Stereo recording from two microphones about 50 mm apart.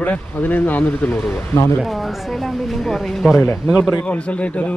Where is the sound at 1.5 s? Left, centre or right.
Left.